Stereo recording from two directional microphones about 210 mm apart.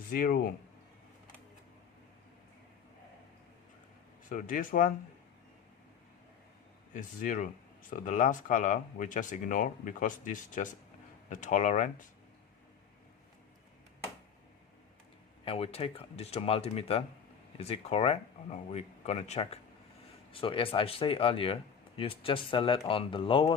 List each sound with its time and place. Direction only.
0.1 s speech: 40° left (ahead or behind)
4.3 s speech: 40° left (ahead or behind)
6.9 s speech: 40° left (ahead or behind)
15.4 s speech: 25° left (ahead or behind)